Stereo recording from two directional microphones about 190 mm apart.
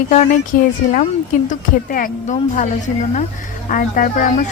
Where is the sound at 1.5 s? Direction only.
45° left (ahead or behind).